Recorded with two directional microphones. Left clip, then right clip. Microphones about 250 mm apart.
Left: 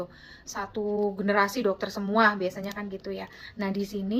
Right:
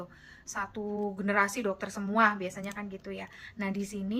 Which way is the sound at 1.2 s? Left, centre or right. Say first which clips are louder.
Left 2 dB; centre.